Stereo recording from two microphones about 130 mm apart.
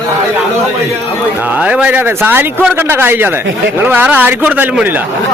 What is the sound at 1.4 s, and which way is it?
A man's voice, 10° right (ahead or behind).